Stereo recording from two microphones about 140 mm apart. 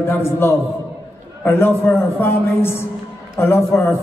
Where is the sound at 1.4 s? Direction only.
20° left (ahead or behind).